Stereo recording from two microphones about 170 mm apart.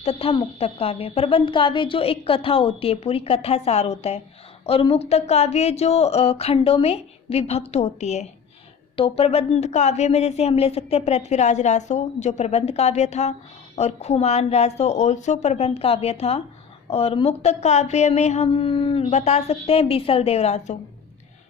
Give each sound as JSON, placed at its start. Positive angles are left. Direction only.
{"t": 0.0, "sound": "speech", "side_deg": 35}